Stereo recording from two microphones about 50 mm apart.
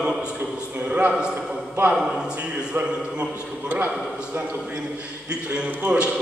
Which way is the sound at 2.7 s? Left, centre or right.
Right.